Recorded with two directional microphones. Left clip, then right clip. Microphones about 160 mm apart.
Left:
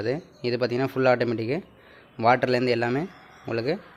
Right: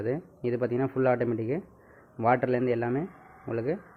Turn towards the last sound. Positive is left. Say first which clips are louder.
# left 4 dB
turn(degrees=15)  # may be behind; listen again after turning